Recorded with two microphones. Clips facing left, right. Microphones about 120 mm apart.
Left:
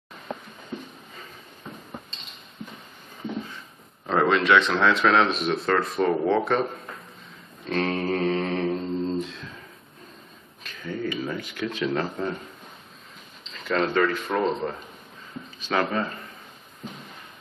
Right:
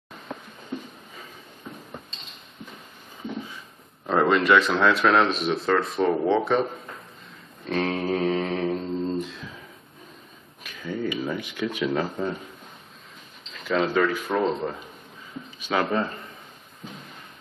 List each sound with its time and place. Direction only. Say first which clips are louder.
3.3 s a sound: left 1 dB; 5° right (ahead or behind)
4.0 s a man's voice: right 1 dB; centre (ahead or behind)
7.6 s mantra: even; centre (ahead or behind)
10.6 s a sound: right 1 dB; 10° right (ahead or behind)
11.3 s speech: right 1 dB; 15° right (ahead or behind)
11.6 s a man's voice: right 1 dB; 5° right (ahead or behind)
13.5 s a man's voice: right 1 dB; centre (ahead or behind)
15.7 s speech: right 1 dB; 15° right (ahead or behind)